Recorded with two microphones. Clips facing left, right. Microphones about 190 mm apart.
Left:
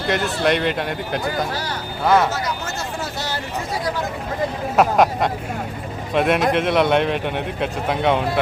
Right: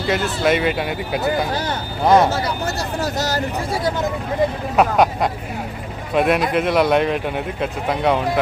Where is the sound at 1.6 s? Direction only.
25° right (ahead or behind); by 3.4 s 40° right (ahead or behind).